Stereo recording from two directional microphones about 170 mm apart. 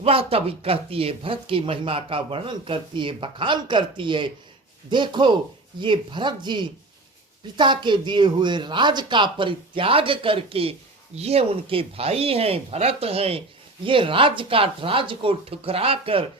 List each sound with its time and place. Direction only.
0.0 s speech: 35° right (ahead or behind)